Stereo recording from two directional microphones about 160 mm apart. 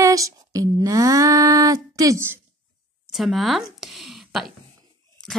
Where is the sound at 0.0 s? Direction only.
20° right (ahead or behind).